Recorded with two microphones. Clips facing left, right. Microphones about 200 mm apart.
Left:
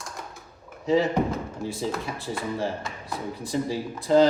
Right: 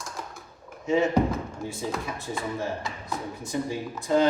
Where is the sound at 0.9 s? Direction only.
35° left (ahead or behind).